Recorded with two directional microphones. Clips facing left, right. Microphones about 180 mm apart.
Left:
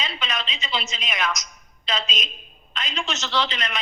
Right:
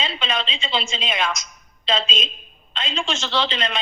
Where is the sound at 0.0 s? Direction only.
25° right (ahead or behind).